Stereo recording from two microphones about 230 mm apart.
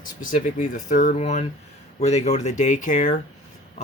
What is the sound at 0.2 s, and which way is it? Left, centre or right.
Speech, left.